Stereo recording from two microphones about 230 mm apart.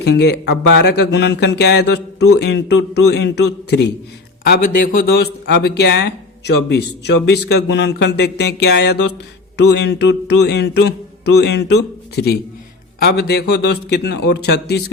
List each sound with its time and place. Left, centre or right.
0.0 s speech: left